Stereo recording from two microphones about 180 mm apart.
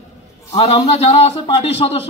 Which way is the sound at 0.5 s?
35° left (ahead or behind).